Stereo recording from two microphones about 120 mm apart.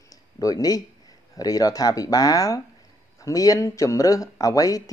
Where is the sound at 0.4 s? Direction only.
30° left (ahead or behind).